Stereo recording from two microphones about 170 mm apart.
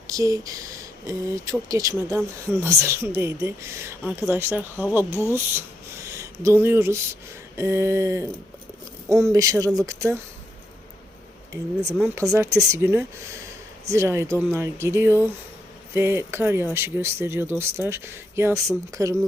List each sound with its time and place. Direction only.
0.2 s speech: 20° right (ahead or behind)
9.3 s speech: 20° right (ahead or behind)
12.0 s speech: 15° right (ahead or behind)